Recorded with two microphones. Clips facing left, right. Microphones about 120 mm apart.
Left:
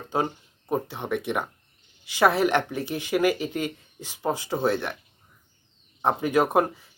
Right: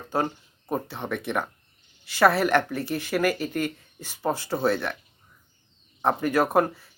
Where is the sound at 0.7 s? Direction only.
15° left (ahead or behind).